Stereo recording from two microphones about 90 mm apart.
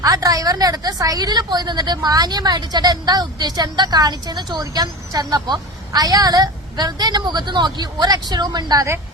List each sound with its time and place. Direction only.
0.0 s a woman's voice: 40° right (ahead or behind)